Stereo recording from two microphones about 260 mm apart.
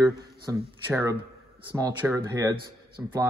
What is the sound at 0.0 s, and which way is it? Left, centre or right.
Speech, centre.